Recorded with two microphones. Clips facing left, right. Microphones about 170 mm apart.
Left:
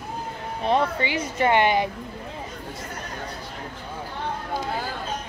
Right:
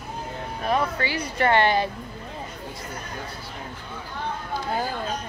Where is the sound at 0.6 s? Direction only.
25° left (ahead or behind).